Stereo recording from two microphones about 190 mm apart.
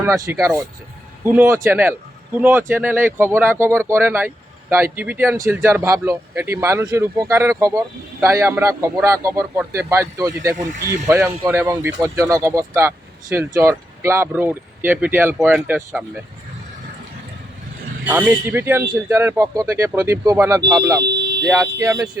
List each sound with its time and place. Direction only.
0.0 s a man's voice: 15° right (ahead or behind)
18.0 s a man's voice: 10° right (ahead or behind)